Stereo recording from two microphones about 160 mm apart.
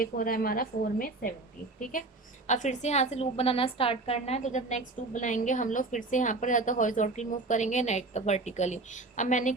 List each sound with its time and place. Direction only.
0.0 s a woman's voice: 65° left (ahead or behind)